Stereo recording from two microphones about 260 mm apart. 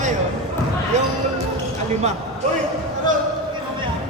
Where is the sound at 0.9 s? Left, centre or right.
Right.